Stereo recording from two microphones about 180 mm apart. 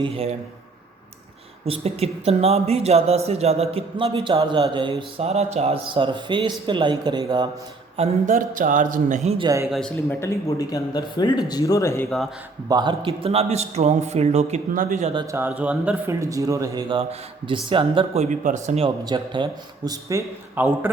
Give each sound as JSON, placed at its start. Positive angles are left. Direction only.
{"t": 0.0, "sound": "speech", "side_deg": -35}
{"t": 1.6, "sound": "speech", "side_deg": -35}
{"t": 7.9, "sound": "a man's voice", "side_deg": -40}
{"t": 9.6, "sound": "a man's voice", "side_deg": 0}
{"t": 10.2, "sound": "speech", "side_deg": 15}
{"t": 12.6, "sound": "speech", "side_deg": -25}
{"t": 15.1, "sound": "speech", "side_deg": -25}
{"t": 15.4, "sound": "speech", "side_deg": -10}